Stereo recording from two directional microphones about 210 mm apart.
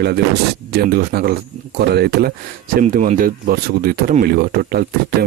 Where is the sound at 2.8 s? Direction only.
35° right (ahead or behind).